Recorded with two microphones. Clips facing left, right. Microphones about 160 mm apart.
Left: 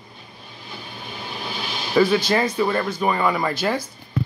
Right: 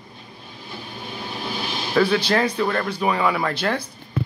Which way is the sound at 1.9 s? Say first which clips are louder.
Left 1 dB; 5° left (ahead or behind).